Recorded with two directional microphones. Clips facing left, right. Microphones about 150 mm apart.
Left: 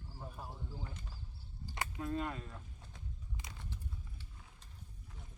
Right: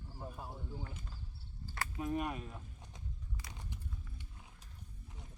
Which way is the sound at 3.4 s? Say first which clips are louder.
Even; 20° left (ahead or behind).